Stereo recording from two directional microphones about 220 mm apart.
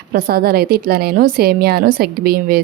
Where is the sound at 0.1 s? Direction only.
45° right (ahead or behind).